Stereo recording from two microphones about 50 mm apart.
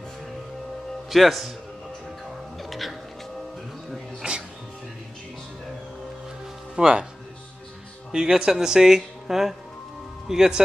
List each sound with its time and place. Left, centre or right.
1.1 s speech: centre
2.7 s music: centre
4.2 s music: centre
6.7 s speech: centre
8.1 s speech: centre